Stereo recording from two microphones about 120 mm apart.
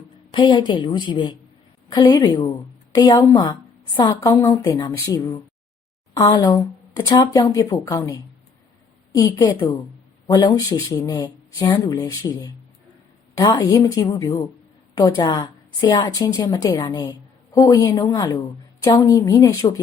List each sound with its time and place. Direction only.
0.3 s a woman's voice: 40° left (ahead or behind)